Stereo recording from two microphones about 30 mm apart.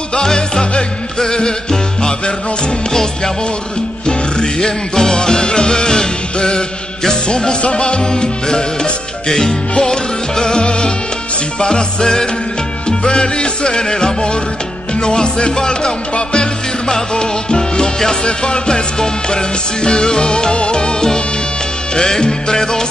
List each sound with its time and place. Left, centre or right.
0.1 s music: left
4.0 s music: left